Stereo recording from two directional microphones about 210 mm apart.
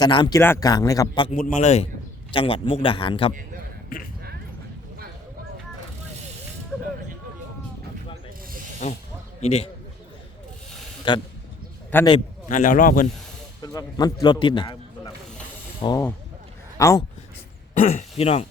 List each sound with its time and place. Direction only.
0.0 s speech: 20° left (ahead or behind)
1.3 s a man's voice: 35° left (ahead or behind)
3.8 s a sound: 40° left (ahead or behind)
8.8 s a man's voice: 35° left (ahead or behind)
11.1 s a man's voice: 20° left (ahead or behind)
11.9 s speech: 10° left (ahead or behind)
12.5 s a man's voice: 40° left (ahead or behind)
13.6 s a man's voice: 20° left (ahead or behind)
17.7 s speech: 35° left (ahead or behind)